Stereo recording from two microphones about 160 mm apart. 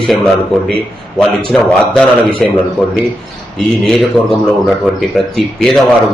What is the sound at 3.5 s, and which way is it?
Speech, centre (ahead or behind).